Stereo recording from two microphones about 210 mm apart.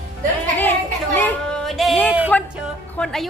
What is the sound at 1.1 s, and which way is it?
Female singing, 10° left (ahead or behind).